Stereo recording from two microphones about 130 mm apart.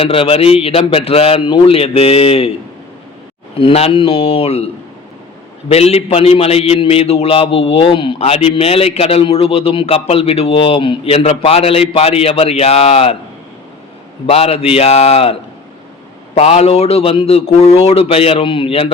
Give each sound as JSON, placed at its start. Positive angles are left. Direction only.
{"t": 0.0, "sound": "a man's voice", "side_deg": 45}
{"t": 14.3, "sound": "a man's voice", "side_deg": 50}